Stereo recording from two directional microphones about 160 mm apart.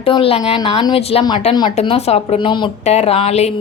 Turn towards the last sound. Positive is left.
turn(degrees=40)  # may be behind; listen again after turning